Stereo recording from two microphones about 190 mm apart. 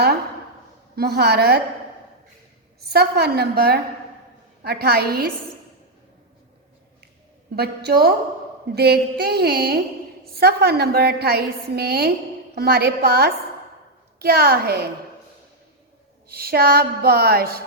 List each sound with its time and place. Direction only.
0.9 s a woman's voice: 55° right (ahead or behind)
2.8 s a woman's voice: 55° right (ahead or behind)
7.5 s a woman's voice: 55° right (ahead or behind)
16.3 s speech: 55° right (ahead or behind)